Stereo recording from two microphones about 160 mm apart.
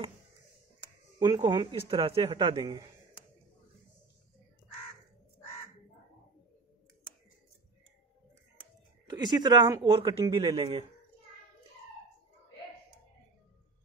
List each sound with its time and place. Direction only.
1.2 s speech: 25° right (ahead or behind)
9.1 s speech: 25° right (ahead or behind); by 10.9 s 40° right (ahead or behind)